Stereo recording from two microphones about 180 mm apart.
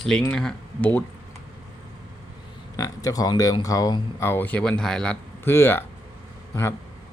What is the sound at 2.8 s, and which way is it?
Speech, 20° left (ahead or behind).